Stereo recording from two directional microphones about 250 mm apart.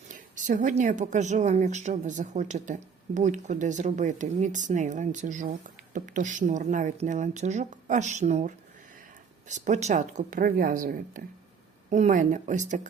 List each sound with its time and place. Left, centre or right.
0.1 s a woman's voice: right